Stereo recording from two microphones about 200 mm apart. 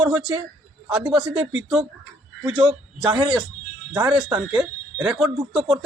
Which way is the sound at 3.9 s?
5° right (ahead or behind).